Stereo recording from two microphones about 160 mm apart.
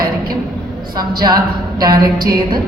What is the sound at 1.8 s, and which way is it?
Speech, 25° right (ahead or behind).